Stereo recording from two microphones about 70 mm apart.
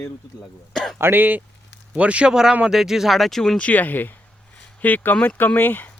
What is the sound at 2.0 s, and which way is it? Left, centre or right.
Speech, centre.